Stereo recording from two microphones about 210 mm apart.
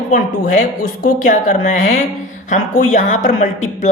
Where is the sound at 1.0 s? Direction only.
40° left (ahead or behind).